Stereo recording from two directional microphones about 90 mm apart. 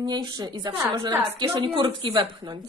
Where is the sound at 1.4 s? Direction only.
65° right (ahead or behind).